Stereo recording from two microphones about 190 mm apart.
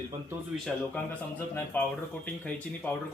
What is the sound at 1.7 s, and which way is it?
Speech, 10° left (ahead or behind).